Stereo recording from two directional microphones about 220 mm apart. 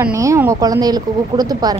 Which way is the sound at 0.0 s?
15° right (ahead or behind).